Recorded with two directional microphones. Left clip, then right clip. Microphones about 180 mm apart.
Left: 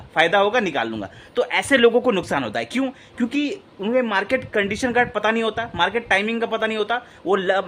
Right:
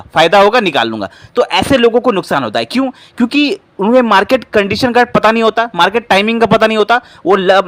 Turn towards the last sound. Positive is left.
turn(degrees=-35)  # may be behind; listen again after turning